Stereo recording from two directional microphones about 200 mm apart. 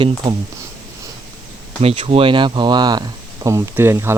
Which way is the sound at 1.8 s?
30° right (ahead or behind).